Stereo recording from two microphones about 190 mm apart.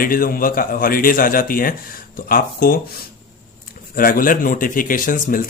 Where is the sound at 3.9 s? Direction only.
50° left (ahead or behind).